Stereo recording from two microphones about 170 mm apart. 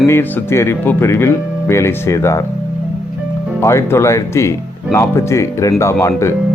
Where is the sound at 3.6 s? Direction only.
15° left (ahead or behind).